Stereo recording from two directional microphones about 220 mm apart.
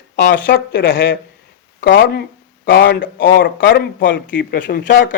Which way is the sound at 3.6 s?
55° left (ahead or behind).